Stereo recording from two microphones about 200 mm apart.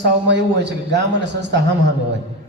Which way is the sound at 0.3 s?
60° right (ahead or behind).